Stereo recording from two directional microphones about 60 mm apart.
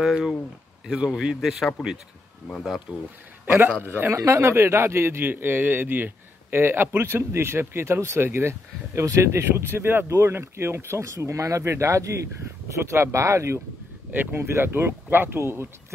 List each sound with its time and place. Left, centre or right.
0.0 s speech: centre
2.9 s speech: centre
3.8 s speech: right
4.2 s a man's voice: right
14.3 s speech: right